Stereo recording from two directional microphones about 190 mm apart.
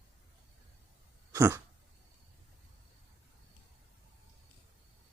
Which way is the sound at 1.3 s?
15° right (ahead or behind).